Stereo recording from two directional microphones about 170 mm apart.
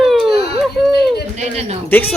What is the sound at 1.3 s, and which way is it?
Speech, 35° right (ahead or behind).